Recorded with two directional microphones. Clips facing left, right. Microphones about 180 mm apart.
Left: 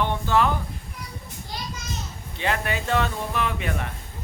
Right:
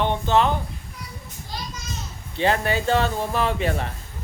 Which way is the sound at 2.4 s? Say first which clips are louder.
Right 5 dB; 30° right (ahead or behind).